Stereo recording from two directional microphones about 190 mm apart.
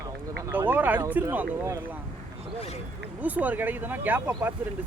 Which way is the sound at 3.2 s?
10° right (ahead or behind).